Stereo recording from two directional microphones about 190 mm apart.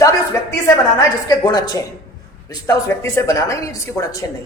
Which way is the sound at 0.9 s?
20° left (ahead or behind).